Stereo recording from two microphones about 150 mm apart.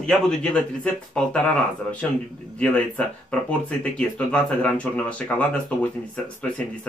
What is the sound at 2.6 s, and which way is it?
Speech, 10° left (ahead or behind).